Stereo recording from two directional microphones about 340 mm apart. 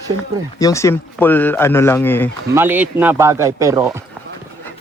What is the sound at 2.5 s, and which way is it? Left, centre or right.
Speech, centre.